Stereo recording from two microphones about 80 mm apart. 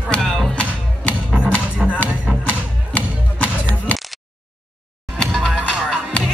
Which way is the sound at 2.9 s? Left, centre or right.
Centre.